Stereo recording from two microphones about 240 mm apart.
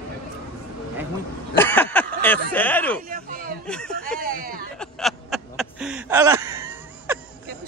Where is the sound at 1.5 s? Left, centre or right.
Centre.